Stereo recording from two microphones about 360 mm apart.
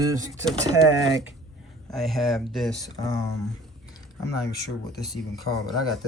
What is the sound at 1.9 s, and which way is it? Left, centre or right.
Speech, centre.